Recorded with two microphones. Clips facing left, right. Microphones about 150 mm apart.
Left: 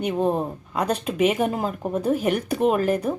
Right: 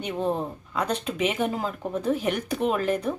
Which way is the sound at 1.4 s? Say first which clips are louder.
Left 3 dB; 45° left (ahead or behind).